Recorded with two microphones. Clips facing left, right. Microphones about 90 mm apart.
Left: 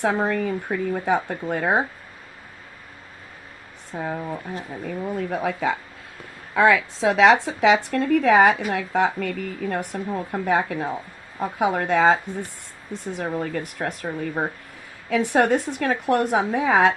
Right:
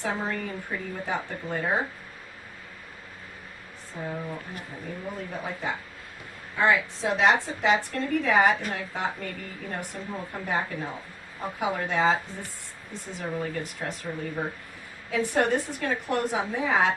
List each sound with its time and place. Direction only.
0.0 s speech: 70° left (ahead or behind)
3.9 s speech: 70° left (ahead or behind)
5.3 s speech: 85° left; by 16.9 s 65° left (ahead or behind)